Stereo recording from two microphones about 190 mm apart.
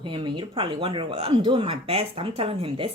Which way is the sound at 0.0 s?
25° right (ahead or behind).